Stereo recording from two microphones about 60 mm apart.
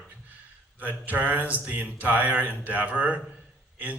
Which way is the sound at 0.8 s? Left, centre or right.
Right.